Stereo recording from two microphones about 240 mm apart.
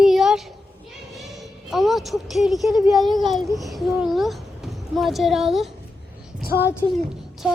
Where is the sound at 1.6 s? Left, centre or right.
Centre.